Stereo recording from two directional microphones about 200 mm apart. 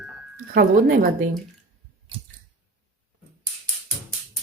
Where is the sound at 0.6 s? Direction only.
45° right (ahead or behind).